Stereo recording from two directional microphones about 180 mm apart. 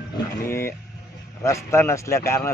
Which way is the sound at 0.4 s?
15° left (ahead or behind).